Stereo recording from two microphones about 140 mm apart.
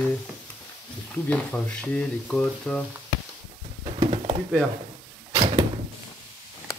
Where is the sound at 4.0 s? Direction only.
40° right (ahead or behind).